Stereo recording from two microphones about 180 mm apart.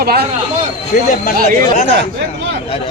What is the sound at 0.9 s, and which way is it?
Speech, 40° left (ahead or behind).